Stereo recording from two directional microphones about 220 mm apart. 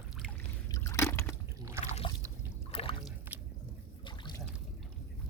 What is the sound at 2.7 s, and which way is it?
Boat, 25° left (ahead or behind).